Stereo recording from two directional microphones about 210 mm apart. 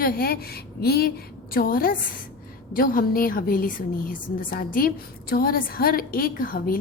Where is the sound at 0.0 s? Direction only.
45° left (ahead or behind).